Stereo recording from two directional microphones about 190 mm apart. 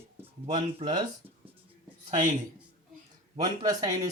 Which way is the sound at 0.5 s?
20° right (ahead or behind).